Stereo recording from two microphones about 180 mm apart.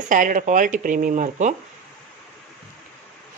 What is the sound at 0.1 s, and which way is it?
A woman's voice, 45° right (ahead or behind).